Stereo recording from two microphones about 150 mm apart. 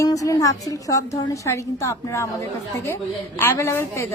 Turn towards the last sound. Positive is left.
turn(degrees=20)  # may be behind; listen again after turning